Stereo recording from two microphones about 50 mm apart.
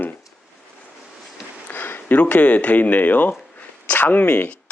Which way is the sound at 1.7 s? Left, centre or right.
Left.